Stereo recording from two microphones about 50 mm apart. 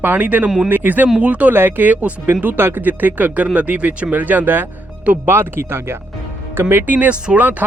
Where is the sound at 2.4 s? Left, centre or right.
Right.